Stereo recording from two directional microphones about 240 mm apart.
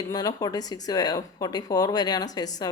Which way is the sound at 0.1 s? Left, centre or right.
Centre.